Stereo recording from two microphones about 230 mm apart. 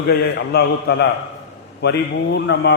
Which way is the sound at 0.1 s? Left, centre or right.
Left.